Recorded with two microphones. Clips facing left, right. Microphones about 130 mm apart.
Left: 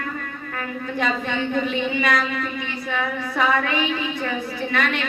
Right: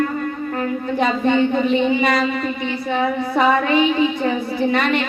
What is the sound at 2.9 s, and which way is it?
Speech, 35° right (ahead or behind).